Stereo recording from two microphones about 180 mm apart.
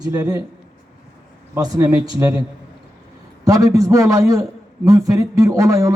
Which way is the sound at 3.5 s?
20° right (ahead or behind).